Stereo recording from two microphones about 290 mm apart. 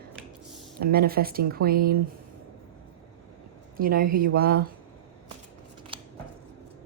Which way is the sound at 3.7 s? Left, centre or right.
Right.